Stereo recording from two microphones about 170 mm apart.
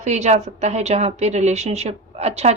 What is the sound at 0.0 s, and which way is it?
A woman's voice, 40° right (ahead or behind).